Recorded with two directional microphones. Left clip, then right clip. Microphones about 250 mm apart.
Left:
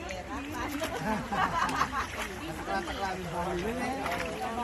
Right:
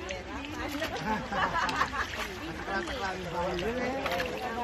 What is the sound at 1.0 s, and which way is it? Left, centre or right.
Speech, left.